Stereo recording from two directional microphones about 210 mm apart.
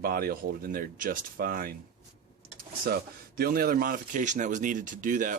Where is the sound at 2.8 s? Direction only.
45° right (ahead or behind).